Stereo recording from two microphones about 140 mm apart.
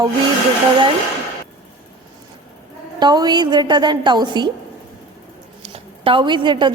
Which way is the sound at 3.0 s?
30° right (ahead or behind).